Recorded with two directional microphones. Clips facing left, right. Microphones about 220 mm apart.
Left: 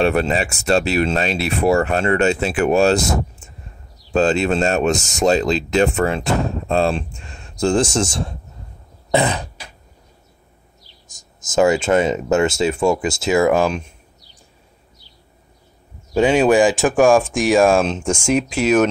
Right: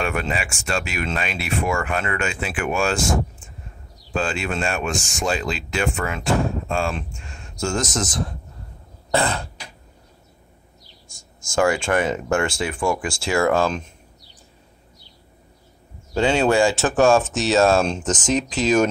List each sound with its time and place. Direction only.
0.0 s speech: 35° left (ahead or behind)
9.1 s throat clearing: 20° left (ahead or behind)
11.1 s speech: 20° left (ahead or behind)
16.2 s speech: 15° left (ahead or behind)